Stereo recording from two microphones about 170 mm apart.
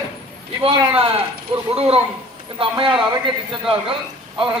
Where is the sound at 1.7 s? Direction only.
35° right (ahead or behind).